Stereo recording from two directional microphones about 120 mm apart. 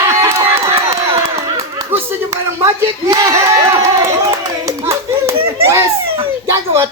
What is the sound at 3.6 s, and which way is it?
Run, 30° right (ahead or behind).